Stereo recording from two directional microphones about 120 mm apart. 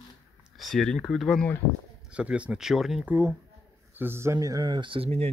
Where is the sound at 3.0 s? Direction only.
20° right (ahead or behind).